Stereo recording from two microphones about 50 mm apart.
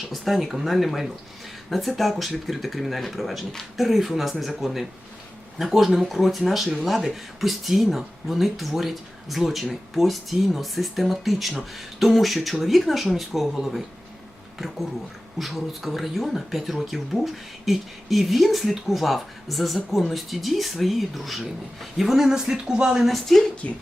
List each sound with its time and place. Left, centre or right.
0.1 s speech: centre
15.4 s speech: centre
23.1 s speech: centre